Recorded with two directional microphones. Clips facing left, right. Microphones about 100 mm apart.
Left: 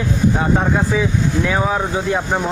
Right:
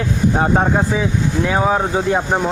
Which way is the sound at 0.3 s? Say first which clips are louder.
Right 1 dB; 30° right (ahead or behind).